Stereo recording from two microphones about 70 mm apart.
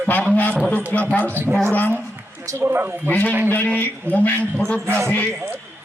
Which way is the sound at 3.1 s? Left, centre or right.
Left.